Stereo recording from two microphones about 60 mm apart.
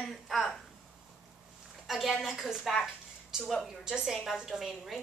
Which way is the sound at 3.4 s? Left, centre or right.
Centre.